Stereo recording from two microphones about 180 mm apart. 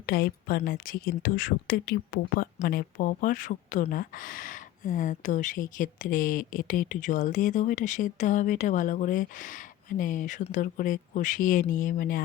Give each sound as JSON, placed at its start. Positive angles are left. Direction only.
{"t": 0.0, "sound": "speech", "side_deg": 55}